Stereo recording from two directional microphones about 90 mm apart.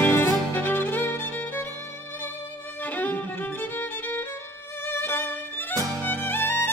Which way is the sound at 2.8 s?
20° left (ahead or behind).